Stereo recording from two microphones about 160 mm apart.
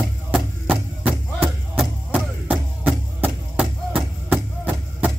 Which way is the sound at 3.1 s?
5° right (ahead or behind).